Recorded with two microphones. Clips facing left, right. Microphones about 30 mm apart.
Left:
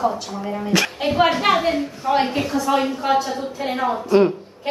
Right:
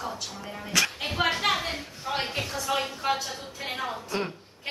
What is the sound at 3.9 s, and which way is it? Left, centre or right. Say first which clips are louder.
Speech: left 15 dB; left.